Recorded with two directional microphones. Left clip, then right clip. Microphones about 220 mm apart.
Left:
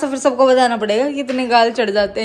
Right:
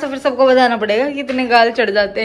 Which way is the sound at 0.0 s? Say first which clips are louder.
Even; 25° left (ahead or behind).